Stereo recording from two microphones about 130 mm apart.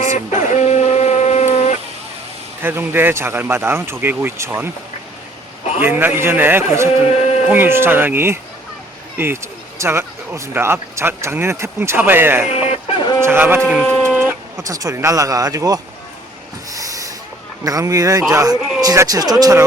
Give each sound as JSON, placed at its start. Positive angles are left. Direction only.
{"t": 0.0, "sound": "a sound", "side_deg": 65}
{"t": 2.6, "sound": "speech", "side_deg": -15}
{"t": 5.8, "sound": "speech", "side_deg": -15}
{"t": 7.1, "sound": "a sound", "side_deg": 50}
{"t": 7.4, "sound": "speech", "side_deg": -15}
{"t": 12.5, "sound": "music", "side_deg": 55}
{"t": 13.0, "sound": "chicken", "side_deg": 30}
{"t": 13.2, "sound": "speech", "side_deg": -15}
{"t": 13.8, "sound": "a sound", "side_deg": 10}
{"t": 14.6, "sound": "speech", "side_deg": -25}
{"t": 16.7, "sound": "vehicle", "side_deg": -25}
{"t": 17.6, "sound": "speech", "side_deg": -25}